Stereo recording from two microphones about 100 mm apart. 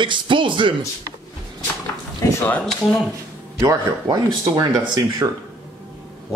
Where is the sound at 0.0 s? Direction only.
55° right (ahead or behind).